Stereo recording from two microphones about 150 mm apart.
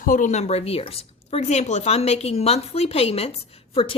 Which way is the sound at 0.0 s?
60° left (ahead or behind).